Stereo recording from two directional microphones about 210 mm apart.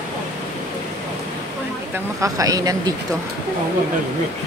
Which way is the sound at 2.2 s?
15° right (ahead or behind).